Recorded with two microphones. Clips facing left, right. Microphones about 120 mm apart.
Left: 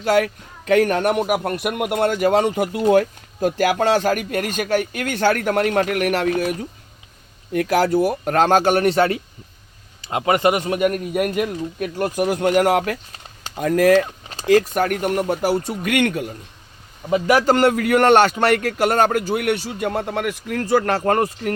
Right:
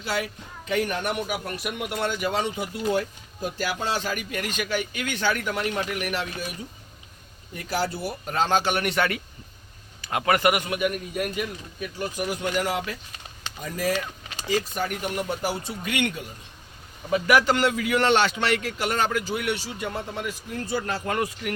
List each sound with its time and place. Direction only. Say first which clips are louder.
0.0 s a man's voice: left 11 dB; 60° left (ahead or behind)
14.0 s vehicle: left 7 dB; 35° left (ahead or behind)
14.6 s a man's voice: left 9 dB; 50° left (ahead or behind)
17.1 s speech: left 4 dB; 25° left (ahead or behind)
17.4 s a man's voice: left 7 dB; 45° left (ahead or behind); by 21.0 s 80° left
21.0 s a man's voice: left 8 dB; 45° left (ahead or behind)